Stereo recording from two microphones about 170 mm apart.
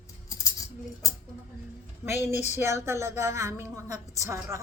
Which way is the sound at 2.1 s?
15° right (ahead or behind).